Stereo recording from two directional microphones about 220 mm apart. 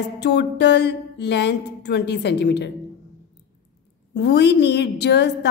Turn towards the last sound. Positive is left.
turn(degrees=50)  # may be behind; listen again after turning